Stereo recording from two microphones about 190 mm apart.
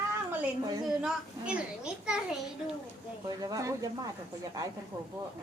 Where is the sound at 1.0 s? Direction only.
5° right (ahead or behind).